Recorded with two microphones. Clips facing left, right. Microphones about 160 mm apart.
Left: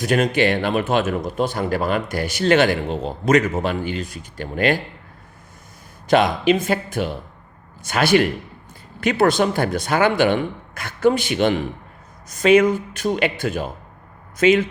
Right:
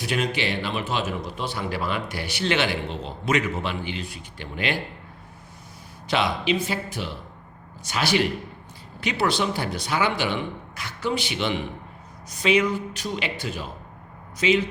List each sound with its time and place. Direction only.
0.0 s a man's voice: 45° left (ahead or behind)
6.1 s a man's voice: 50° left (ahead or behind)